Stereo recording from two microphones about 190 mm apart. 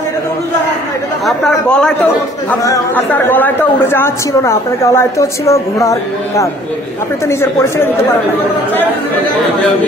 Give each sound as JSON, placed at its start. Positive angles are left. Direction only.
{"t": 1.2, "sound": "speech", "side_deg": 5}
{"t": 2.6, "sound": "a man's voice", "side_deg": 15}